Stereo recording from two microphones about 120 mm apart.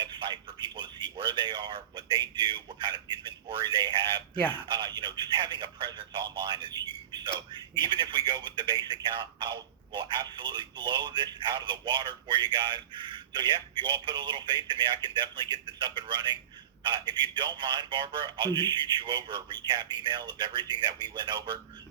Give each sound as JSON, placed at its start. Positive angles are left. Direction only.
{"t": 0.0, "sound": "speech", "side_deg": -40}